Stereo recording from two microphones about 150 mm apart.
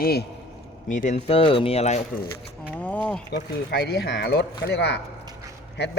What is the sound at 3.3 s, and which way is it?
Speech, 90° left.